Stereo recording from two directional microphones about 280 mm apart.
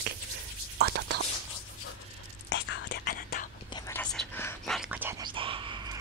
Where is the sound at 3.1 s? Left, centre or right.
Left.